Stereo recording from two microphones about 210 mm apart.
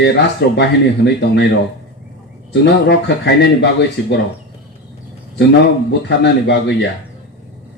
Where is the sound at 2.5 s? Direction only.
55° left (ahead or behind).